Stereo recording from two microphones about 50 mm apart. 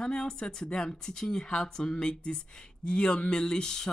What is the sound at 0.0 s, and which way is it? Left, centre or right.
Speech, centre.